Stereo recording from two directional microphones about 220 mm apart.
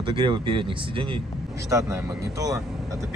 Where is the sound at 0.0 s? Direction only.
25° right (ahead or behind).